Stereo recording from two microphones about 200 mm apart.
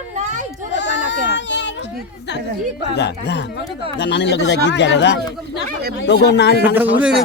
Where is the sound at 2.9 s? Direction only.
55° left (ahead or behind).